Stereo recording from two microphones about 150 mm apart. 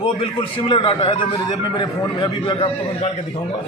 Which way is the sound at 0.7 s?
35° left (ahead or behind).